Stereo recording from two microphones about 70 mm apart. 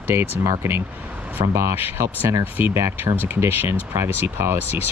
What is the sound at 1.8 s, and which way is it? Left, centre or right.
Speech, right.